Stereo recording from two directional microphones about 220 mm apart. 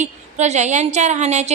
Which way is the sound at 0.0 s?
30° right (ahead or behind).